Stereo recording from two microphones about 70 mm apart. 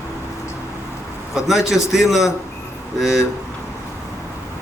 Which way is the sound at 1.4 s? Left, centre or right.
Centre.